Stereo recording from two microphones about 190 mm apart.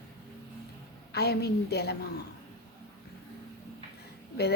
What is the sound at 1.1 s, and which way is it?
Speech, 60° left (ahead or behind).